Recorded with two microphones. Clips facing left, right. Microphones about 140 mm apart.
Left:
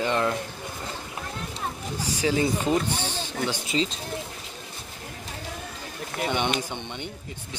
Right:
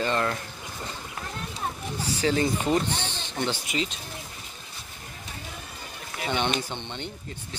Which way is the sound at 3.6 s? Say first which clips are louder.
Left 3 dB; 30° left (ahead or behind).